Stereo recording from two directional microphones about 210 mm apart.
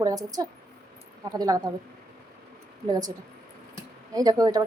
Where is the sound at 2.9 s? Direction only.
15° right (ahead or behind).